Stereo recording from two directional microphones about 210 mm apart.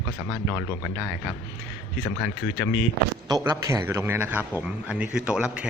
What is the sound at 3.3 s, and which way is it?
A man's voice, 15° right (ahead or behind).